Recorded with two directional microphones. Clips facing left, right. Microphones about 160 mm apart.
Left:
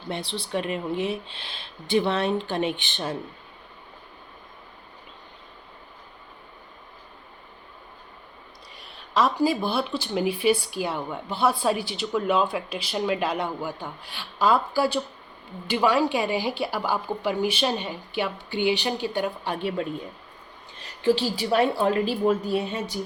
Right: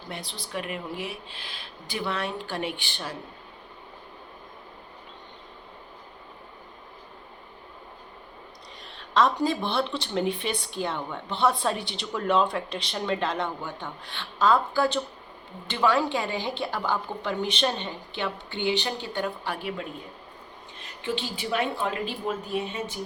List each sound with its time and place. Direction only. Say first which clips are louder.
0.1 s speech: left 7 dB; 30° left (ahead or behind)
8.8 s a sound: even; 5° left (ahead or behind)
9.4 s speech: left 2 dB; 5° left (ahead or behind); by 19.7 s 20° left (ahead or behind)
21.0 s a woman's voice: left 8 dB; 35° left (ahead or behind)